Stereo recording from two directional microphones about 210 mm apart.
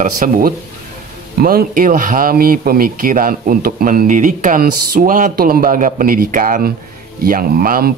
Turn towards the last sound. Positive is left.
turn(degrees=-45)  # may be behind; listen again after turning